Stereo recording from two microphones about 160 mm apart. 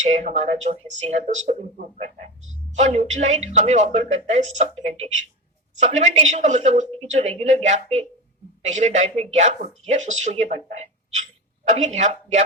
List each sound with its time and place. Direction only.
0.0 s speech: 45° right (ahead or behind)